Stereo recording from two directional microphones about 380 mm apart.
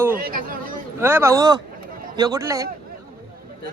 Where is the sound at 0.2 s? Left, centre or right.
Right.